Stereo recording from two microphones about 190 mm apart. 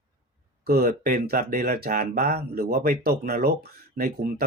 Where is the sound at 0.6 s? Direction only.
50° right (ahead or behind).